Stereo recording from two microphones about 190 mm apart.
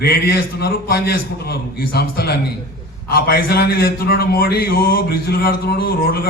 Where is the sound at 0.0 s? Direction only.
55° left (ahead or behind).